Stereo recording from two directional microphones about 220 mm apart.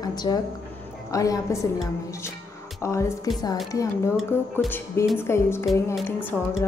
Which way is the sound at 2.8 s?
15° left (ahead or behind).